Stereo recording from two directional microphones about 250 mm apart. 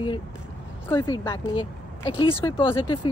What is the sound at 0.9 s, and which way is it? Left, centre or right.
A woman's voice, centre.